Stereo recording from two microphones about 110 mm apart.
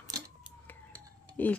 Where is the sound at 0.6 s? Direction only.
15° left (ahead or behind).